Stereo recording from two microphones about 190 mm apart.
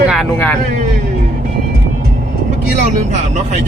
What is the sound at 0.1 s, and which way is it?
Speech, 5° left (ahead or behind).